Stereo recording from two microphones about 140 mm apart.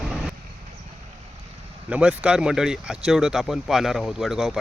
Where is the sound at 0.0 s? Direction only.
Centre (ahead or behind).